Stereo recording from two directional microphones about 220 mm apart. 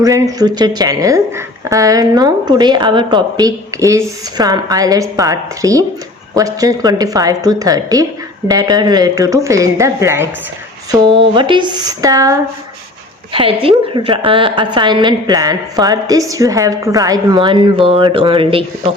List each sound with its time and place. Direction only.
0.0 s a woman's voice: 15° right (ahead or behind)